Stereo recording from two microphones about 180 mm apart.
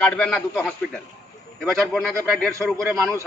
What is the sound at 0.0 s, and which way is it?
A man's voice, 5° left (ahead or behind).